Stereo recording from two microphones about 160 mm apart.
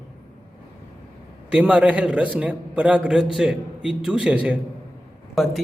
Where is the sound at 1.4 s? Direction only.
10° right (ahead or behind).